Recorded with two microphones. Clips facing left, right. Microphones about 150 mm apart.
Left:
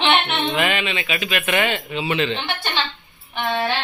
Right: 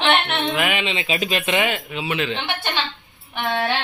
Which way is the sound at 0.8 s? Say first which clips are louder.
Right 2 dB; 25° right (ahead or behind).